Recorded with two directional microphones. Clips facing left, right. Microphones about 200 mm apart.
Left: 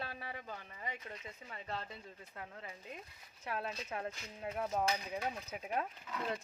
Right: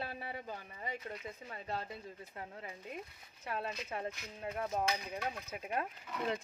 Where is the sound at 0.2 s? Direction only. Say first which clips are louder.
Right 3 dB; 30° right (ahead or behind).